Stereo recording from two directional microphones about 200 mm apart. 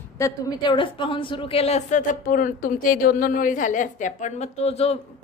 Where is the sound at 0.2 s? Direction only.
20° left (ahead or behind).